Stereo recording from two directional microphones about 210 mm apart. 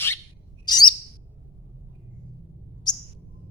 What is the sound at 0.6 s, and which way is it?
Bird, 20° left (ahead or behind).